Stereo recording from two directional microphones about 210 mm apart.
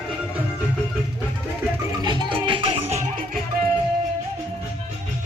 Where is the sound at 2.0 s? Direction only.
20° right (ahead or behind).